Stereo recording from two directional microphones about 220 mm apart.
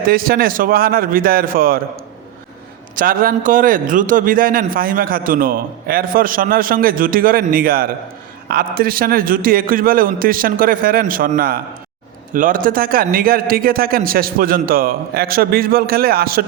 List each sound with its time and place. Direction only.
0.1 s a man's voice: 40° right (ahead or behind)
2.9 s a man's voice: 40° right (ahead or behind)